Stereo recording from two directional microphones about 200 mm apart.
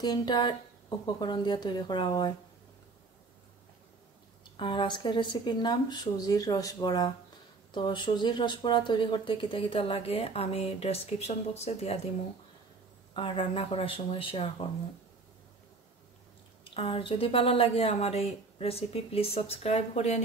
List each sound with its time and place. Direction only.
0.0 s speech: 20° left (ahead or behind)
4.6 s speech: 25° left (ahead or behind)
13.1 s speech: 25° left (ahead or behind)
16.7 s speech: 25° left (ahead or behind)